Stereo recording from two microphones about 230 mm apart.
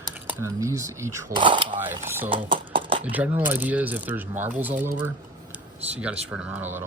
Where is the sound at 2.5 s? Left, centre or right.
Right.